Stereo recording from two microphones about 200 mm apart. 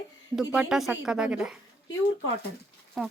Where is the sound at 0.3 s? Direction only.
5° right (ahead or behind).